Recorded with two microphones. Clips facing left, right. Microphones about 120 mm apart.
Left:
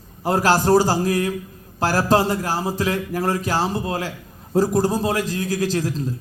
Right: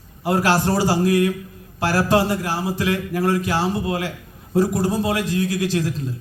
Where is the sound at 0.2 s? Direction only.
40° left (ahead or behind).